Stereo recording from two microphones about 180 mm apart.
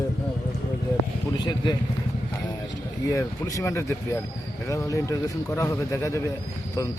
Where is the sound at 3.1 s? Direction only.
20° left (ahead or behind).